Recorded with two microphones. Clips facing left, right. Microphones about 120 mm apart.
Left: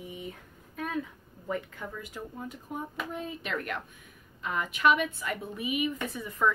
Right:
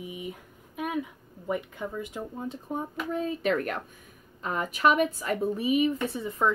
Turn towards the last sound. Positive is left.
turn(degrees=-25)  # may be behind; listen again after turning